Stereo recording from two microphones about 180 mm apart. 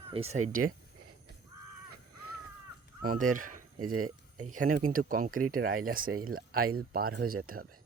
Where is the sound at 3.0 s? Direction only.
50° right (ahead or behind).